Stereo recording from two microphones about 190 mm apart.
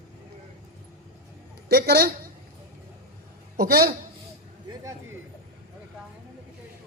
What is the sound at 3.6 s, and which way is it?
Speech, 50° right (ahead or behind).